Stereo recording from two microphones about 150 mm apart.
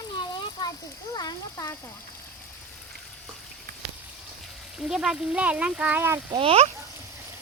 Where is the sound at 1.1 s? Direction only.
25° left (ahead or behind).